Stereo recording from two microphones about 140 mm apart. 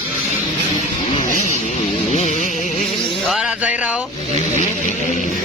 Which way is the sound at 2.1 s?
55° left (ahead or behind).